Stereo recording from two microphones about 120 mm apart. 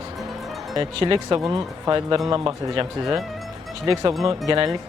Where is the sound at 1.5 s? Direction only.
30° right (ahead or behind).